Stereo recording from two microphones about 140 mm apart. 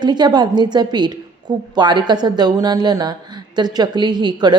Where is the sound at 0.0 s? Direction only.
30° right (ahead or behind).